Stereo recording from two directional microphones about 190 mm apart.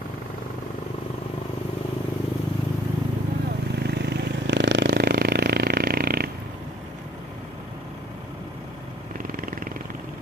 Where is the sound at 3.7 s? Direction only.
60° right (ahead or behind).